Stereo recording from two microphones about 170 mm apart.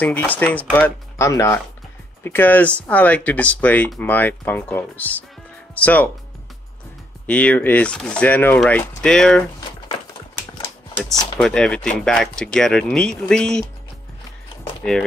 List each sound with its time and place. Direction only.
0.0 s speech: 10° left (ahead or behind)
7.2 s speech: 10° left (ahead or behind)
11.1 s speech: 25° left (ahead or behind)
11.3 s speech: 5° left (ahead or behind)